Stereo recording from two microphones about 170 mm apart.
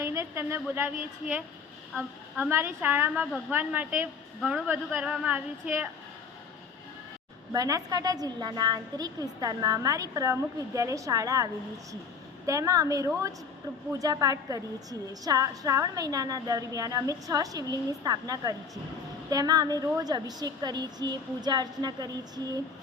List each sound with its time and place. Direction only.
0.0 s a woman's voice: 15° right (ahead or behind)
7.5 s a woman's voice: 20° right (ahead or behind)
12.5 s a woman's voice: 20° right (ahead or behind)